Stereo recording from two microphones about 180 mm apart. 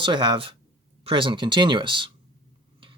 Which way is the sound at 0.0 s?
25° right (ahead or behind).